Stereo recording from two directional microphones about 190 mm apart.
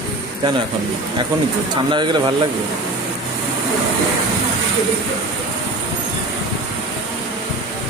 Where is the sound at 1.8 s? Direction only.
25° right (ahead or behind).